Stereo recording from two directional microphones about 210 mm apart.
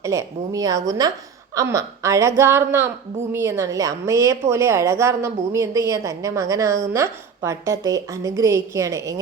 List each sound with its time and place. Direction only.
0.0 s a woman's voice: 15° right (ahead or behind)